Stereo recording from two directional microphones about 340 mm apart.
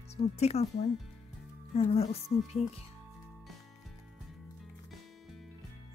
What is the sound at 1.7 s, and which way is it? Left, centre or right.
Speech, centre.